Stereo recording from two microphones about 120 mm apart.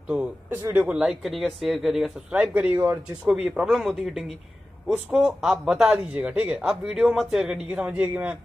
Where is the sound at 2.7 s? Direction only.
20° right (ahead or behind).